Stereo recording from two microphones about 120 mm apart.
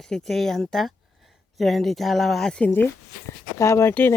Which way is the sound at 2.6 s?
15° left (ahead or behind).